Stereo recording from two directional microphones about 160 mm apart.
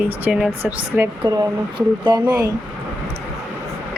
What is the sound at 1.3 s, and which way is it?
Speech, 25° right (ahead or behind).